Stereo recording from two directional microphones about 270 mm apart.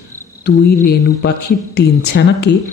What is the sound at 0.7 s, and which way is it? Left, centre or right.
Speech, left.